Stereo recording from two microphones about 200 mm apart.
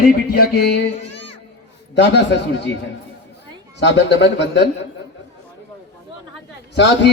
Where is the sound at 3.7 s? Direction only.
60° left (ahead or behind).